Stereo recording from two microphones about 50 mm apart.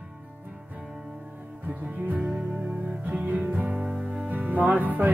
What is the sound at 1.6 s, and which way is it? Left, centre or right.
Music, right.